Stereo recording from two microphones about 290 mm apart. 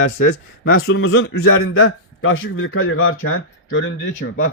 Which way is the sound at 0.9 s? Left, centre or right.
Left.